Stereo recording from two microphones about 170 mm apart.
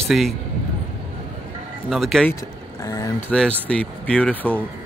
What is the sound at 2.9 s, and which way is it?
Speech, 20° left (ahead or behind).